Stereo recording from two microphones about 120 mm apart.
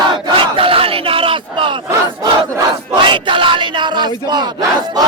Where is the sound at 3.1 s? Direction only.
40° right (ahead or behind).